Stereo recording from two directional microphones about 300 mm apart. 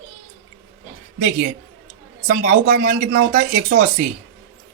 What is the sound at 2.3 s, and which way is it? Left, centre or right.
Speech, right.